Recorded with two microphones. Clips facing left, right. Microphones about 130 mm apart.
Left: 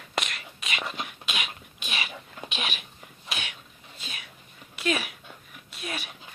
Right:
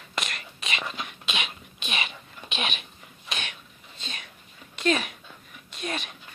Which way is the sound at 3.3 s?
10° left (ahead or behind).